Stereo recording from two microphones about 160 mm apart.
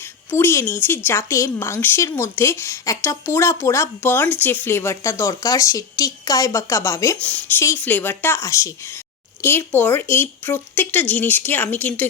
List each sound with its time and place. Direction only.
0.0 s a woman's voice: 15° left (ahead or behind)